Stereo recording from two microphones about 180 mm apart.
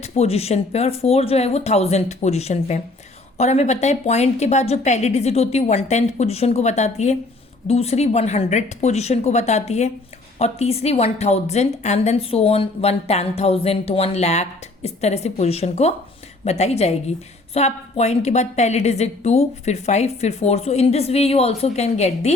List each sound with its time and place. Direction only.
0.0 s a woman's voice: 35° left (ahead or behind)